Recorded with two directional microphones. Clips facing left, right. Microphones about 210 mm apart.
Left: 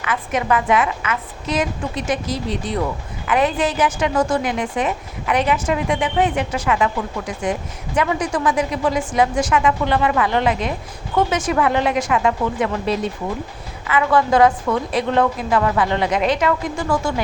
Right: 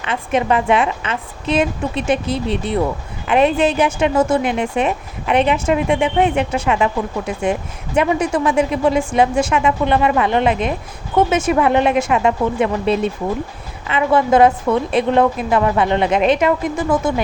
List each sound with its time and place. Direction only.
0.0 s a woman's voice: 25° right (ahead or behind)
2.2 s speech: 60° right (ahead or behind)
3.2 s a woman's voice: 25° right (ahead or behind)
12.8 s speech: 60° right (ahead or behind)
13.8 s a woman's voice: 25° right (ahead or behind)